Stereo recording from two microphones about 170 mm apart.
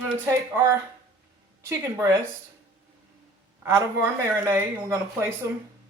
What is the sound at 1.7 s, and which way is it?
Speech, 15° right (ahead or behind).